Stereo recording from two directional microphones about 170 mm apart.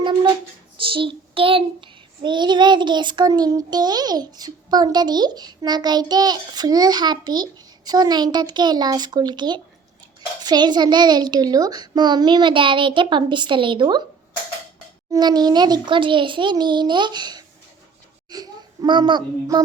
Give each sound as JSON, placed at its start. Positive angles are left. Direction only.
{"t": 0.8, "sound": "child singing", "side_deg": -30}
{"t": 15.1, "sound": "child singing", "side_deg": -25}
{"t": 18.3, "sound": "a child's voice", "side_deg": -25}